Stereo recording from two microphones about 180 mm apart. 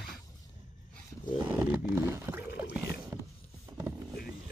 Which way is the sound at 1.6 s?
10° right (ahead or behind).